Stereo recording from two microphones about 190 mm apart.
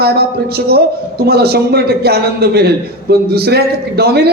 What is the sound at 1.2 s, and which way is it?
Speech, 55° right (ahead or behind).